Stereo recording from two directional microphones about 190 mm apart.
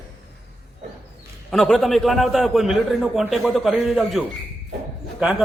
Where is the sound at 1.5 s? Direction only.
Centre (ahead or behind).